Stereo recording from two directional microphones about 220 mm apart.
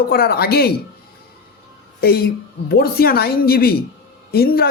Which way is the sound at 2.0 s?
45° left (ahead or behind).